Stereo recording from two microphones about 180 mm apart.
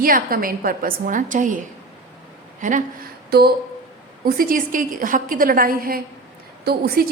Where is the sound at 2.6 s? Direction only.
45° right (ahead or behind).